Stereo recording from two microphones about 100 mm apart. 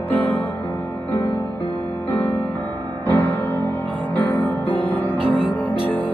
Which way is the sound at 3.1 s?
15° left (ahead or behind).